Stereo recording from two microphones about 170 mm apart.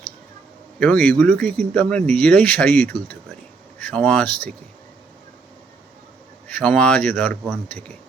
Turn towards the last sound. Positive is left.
turn(degrees=10)  # may be behind; listen again after turning